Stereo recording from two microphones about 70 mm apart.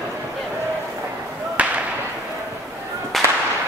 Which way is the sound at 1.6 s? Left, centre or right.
Centre.